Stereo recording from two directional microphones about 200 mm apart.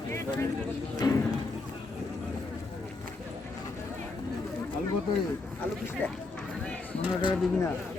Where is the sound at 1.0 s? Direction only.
20° left (ahead or behind).